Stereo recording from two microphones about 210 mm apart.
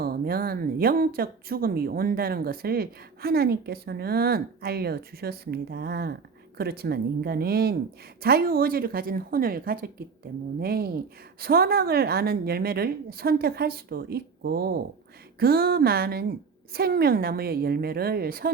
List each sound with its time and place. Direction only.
0.0 s speech: 45° right (ahead or behind)